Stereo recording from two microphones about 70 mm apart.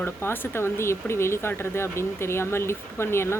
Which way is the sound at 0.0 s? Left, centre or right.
Left.